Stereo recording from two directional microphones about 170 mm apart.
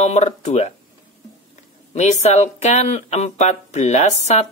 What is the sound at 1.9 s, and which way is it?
Speech, 40° left (ahead or behind).